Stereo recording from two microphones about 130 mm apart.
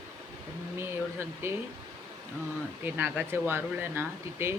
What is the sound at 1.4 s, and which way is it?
Speech, 20° right (ahead or behind).